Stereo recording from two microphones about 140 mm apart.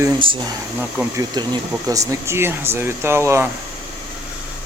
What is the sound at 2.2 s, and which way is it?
Speech, 15° right (ahead or behind).